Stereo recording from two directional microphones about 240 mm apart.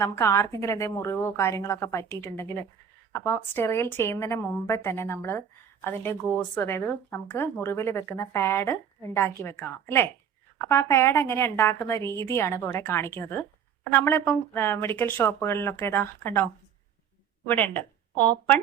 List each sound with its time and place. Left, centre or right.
0.0 s speech: centre
17.5 s speech: centre
18.1 s speech: centre